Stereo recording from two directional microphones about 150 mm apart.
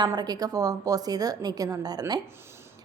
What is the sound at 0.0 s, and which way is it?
A woman's voice, 25° right (ahead or behind).